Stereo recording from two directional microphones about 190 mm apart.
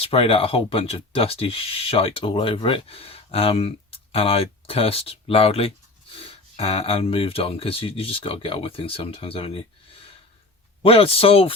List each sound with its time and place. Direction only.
0.0 s speech: 30° left (ahead or behind)